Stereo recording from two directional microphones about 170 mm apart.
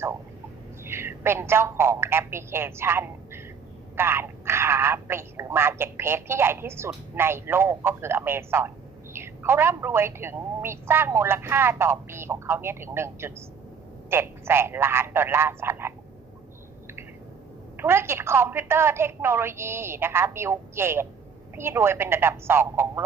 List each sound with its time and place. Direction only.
0.9 s a woman's voice: 15° right (ahead or behind)
17.7 s speech: 15° right (ahead or behind)